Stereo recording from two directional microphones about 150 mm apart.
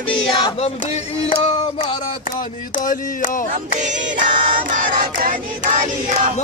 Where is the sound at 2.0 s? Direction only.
60° left (ahead or behind).